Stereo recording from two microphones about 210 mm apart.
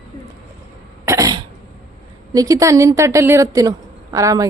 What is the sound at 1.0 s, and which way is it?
Cough, 15° right (ahead or behind).